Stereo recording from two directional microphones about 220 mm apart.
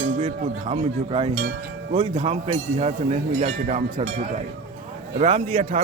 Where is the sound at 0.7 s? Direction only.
25° right (ahead or behind).